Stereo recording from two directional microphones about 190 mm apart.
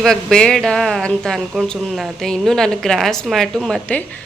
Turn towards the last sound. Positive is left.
turn(degrees=0)  # may be behind; listen again after turning